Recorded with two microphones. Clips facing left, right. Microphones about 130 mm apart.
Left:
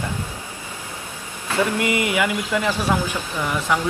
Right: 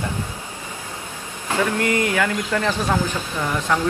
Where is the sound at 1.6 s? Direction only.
15° left (ahead or behind).